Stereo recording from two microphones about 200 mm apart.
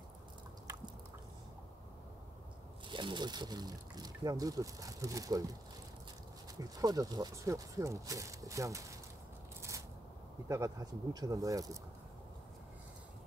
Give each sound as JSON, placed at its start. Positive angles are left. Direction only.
{"t": 2.9, "sound": "speech", "side_deg": -25}
{"t": 6.6, "sound": "speech", "side_deg": -20}
{"t": 9.6, "sound": "scissors", "side_deg": -15}
{"t": 10.5, "sound": "speech", "side_deg": -15}